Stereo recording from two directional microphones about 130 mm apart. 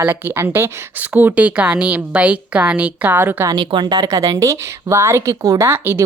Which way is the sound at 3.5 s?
30° right (ahead or behind).